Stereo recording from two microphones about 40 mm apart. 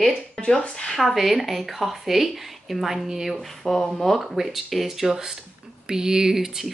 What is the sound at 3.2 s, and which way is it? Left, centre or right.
A woman's voice, centre.